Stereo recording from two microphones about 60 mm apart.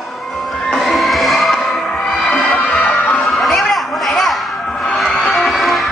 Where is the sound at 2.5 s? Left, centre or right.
Left.